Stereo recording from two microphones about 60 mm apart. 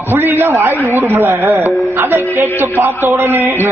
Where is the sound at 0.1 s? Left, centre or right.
Right.